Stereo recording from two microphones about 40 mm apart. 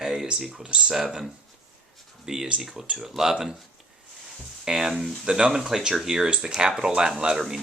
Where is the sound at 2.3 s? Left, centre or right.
Centre.